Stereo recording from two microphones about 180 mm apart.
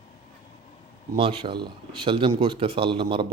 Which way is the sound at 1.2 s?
30° right (ahead or behind).